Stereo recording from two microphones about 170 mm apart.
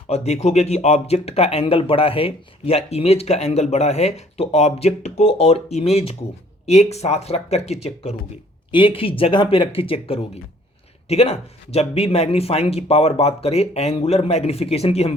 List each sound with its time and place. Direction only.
0.1 s speech: 40° left (ahead or behind)